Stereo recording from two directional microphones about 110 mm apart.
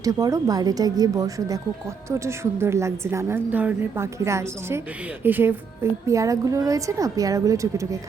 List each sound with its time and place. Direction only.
0.0 s a woman's voice: 30° right (ahead or behind)